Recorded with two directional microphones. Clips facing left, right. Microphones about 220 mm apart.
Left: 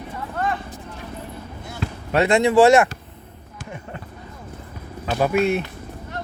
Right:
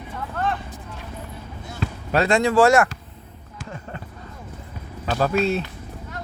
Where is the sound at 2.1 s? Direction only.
20° left (ahead or behind).